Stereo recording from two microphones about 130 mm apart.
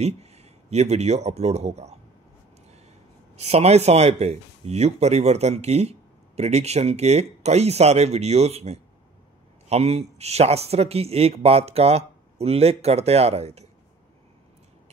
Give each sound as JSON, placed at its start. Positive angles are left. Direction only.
{"t": 0.0, "sound": "speech", "side_deg": -55}
{"t": 3.3, "sound": "speech", "side_deg": -55}